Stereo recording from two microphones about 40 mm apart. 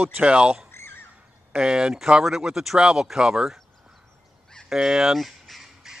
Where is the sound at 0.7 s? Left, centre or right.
Left.